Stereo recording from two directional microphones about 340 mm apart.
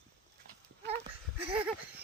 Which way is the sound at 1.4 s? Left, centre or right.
Centre.